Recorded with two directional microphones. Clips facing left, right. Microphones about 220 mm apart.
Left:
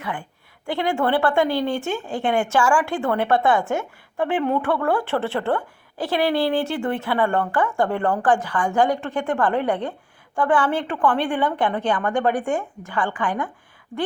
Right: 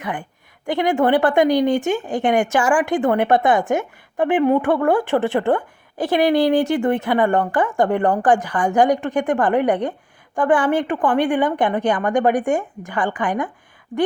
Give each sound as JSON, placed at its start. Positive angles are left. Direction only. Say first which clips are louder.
{"t": 0.0, "sound": "a woman's voice", "louder": "right 3 dB", "side_deg": -20}